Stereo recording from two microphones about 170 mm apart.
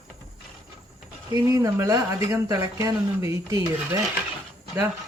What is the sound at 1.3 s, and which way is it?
Speech, 20° right (ahead or behind).